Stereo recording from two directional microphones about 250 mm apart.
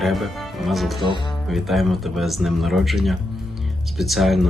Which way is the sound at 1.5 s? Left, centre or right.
Centre.